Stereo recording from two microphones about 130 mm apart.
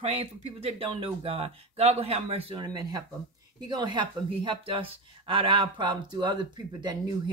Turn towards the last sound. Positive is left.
turn(degrees=-35)  # may be behind; listen again after turning